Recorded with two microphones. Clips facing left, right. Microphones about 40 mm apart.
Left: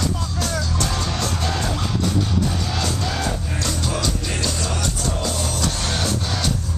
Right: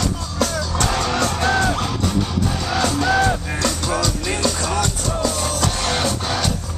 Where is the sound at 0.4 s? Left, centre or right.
Right.